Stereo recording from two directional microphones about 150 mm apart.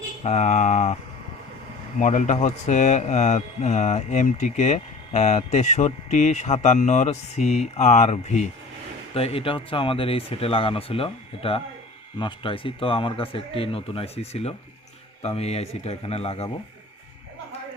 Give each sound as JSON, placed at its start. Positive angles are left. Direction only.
{"t": 0.2, "sound": "speech", "side_deg": 50}
{"t": 2.0, "sound": "speech", "side_deg": 55}